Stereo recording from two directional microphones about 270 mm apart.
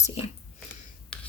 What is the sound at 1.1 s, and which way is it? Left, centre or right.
Rub, centre.